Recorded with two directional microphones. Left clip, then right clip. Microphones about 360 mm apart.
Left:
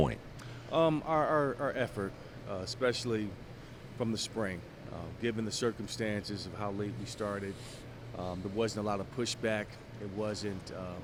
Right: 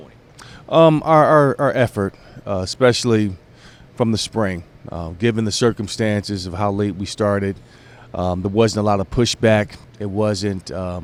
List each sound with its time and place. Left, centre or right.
0.7 s speech: right
3.9 s speech: right